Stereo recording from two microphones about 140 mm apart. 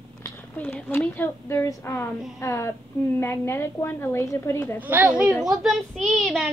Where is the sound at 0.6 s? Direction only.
15° left (ahead or behind).